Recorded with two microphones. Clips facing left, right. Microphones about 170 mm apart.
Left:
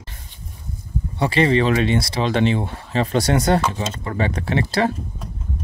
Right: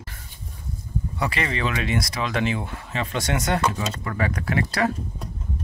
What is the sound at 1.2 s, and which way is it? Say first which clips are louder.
Speech: left 10 dB; 30° left (ahead or behind).